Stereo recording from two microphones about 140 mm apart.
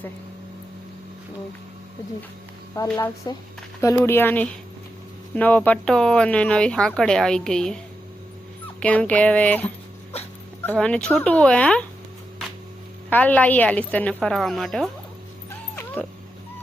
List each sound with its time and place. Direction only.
2.7 s a woman's voice: 25° left (ahead or behind); by 7.8 s 5° left (ahead or behind)
8.8 s a woman's voice: 10° left (ahead or behind)
13.1 s a woman's voice: 10° left (ahead or behind)
15.4 s dog: 15° left (ahead or behind)